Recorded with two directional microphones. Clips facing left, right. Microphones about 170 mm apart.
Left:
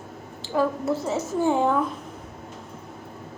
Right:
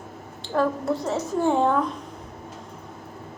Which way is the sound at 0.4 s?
5° left (ahead or behind).